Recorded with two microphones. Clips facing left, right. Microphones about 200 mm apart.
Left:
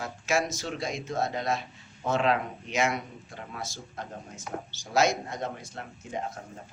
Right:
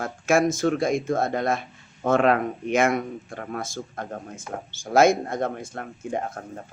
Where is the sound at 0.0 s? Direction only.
50° right (ahead or behind).